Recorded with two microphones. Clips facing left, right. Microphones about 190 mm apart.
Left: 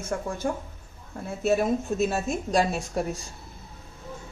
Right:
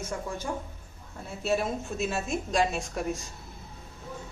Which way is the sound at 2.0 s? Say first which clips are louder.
Left 4 dB; 40° left (ahead or behind).